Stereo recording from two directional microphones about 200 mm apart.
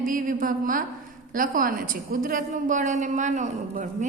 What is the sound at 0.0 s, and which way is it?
A woman's voice, 45° right (ahead or behind).